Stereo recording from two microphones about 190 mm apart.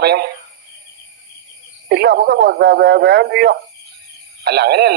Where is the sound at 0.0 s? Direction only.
60° right (ahead or behind).